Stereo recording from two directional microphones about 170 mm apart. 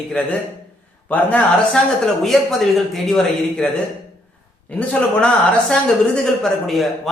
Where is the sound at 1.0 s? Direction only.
10° left (ahead or behind).